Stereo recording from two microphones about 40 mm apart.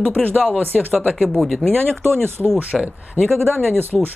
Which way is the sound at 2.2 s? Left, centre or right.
Right.